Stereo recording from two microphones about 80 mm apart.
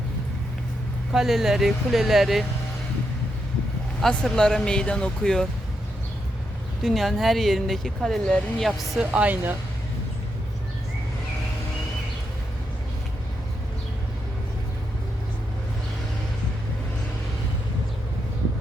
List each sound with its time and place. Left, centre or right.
1.1 s speech: centre
4.1 s speech: centre
6.8 s speech: centre
9.0 s speech: centre